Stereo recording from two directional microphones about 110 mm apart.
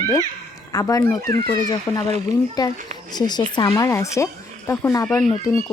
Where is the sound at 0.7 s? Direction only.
30° left (ahead or behind).